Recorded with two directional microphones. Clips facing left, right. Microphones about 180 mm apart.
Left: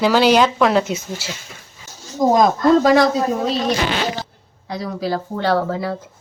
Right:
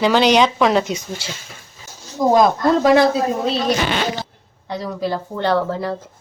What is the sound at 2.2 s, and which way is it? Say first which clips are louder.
Speech: even; 20° left (ahead or behind).